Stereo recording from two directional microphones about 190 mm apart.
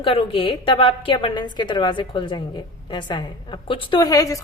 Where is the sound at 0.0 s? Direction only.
30° left (ahead or behind).